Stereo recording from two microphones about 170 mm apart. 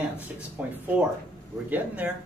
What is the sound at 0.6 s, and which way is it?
Speech, 10° right (ahead or behind).